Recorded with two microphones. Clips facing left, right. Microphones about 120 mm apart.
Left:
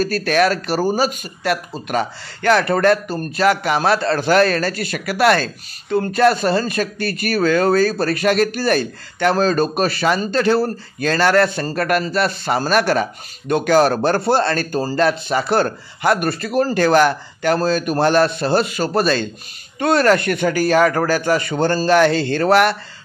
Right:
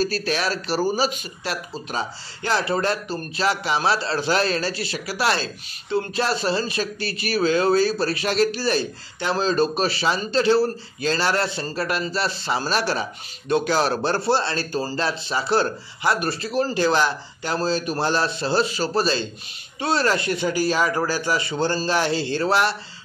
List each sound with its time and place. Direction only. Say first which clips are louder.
0.0 s a man's voice: left 7 dB; 50° left (ahead or behind)